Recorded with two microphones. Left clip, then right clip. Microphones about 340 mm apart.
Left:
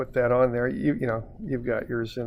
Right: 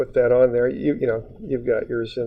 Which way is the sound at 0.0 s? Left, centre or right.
Left.